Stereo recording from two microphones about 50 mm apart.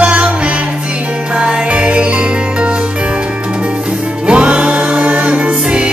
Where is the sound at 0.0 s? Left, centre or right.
Right.